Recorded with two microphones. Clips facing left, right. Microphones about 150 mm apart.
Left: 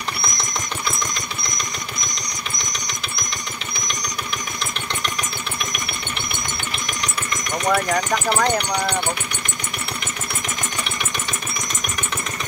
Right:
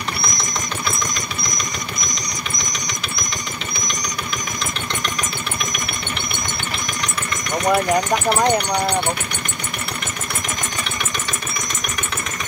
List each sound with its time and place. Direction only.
7.6 s speech: 20° right (ahead or behind)